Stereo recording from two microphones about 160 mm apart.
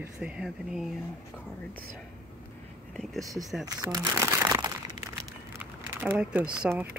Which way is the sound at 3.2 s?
20° right (ahead or behind).